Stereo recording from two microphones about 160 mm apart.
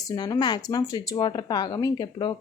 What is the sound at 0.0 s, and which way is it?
A woman's voice, 25° left (ahead or behind).